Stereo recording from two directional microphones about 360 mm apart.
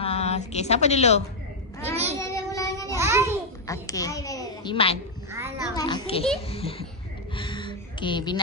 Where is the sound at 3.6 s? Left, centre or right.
Centre.